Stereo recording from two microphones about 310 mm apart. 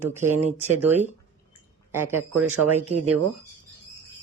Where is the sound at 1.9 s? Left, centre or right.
Centre.